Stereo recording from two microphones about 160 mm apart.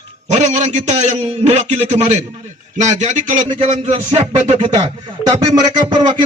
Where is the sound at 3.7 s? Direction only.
40° right (ahead or behind).